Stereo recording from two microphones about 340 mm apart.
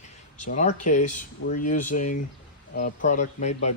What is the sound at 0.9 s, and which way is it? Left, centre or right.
Speech, left.